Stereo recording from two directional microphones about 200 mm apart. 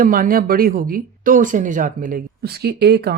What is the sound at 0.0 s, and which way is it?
Speech, 45° right (ahead or behind).